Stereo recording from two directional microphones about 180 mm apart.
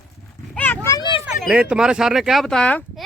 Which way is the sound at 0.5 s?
10° left (ahead or behind).